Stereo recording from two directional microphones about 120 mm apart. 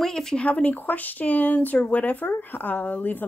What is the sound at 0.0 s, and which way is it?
Speech, 5° left (ahead or behind).